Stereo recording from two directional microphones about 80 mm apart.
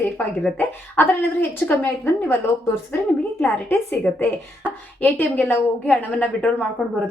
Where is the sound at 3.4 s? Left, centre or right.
Left.